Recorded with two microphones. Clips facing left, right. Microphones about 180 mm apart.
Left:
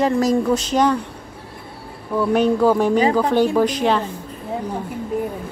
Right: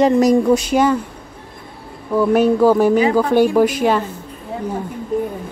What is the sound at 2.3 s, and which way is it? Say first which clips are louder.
A woman's voice: right 3 dB; 5° right (ahead or behind).